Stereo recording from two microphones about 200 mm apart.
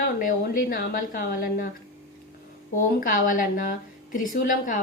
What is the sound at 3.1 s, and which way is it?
A woman's voice, 45° left (ahead or behind).